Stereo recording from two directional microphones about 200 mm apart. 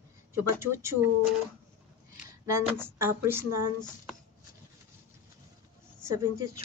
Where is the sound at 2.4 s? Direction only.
10° right (ahead or behind).